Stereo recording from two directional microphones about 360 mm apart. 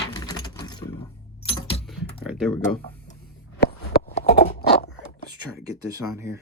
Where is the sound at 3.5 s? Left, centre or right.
Left.